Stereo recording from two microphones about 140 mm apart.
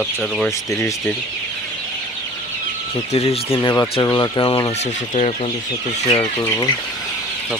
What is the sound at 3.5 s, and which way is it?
Speech, 20° left (ahead or behind).